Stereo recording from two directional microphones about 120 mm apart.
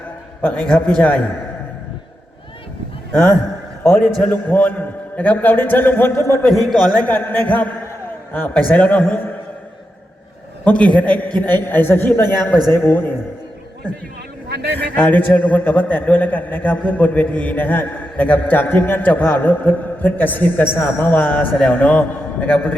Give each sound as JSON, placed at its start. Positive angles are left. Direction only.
{"t": 0.4, "sound": "a man's voice", "side_deg": 10}
{"t": 3.1, "sound": "a man's voice", "side_deg": 20}
{"t": 6.5, "sound": "a man's voice", "side_deg": 0}
{"t": 7.0, "sound": "a man's voice", "side_deg": 15}
{"t": 10.6, "sound": "a man's voice", "side_deg": 10}
{"t": 14.8, "sound": "a man's voice", "side_deg": 15}